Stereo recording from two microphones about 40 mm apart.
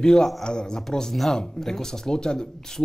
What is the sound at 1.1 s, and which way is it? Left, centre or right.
Speech, centre.